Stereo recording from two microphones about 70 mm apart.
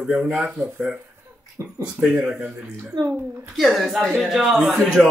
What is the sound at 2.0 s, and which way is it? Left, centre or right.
Speech, centre.